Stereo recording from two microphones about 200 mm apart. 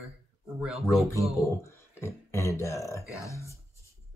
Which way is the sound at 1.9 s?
15° left (ahead or behind).